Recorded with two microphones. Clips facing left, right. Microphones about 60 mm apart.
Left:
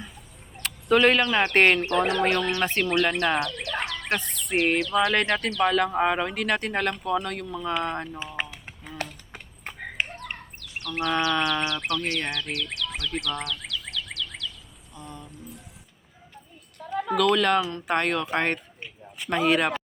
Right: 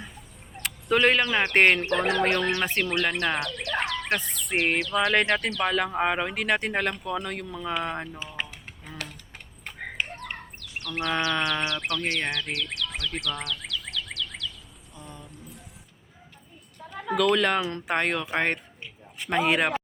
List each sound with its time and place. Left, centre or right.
0.5 s speech: centre
9.0 s typing: left
10.2 s bird: centre
14.9 s a sound: centre
17.2 s speech: centre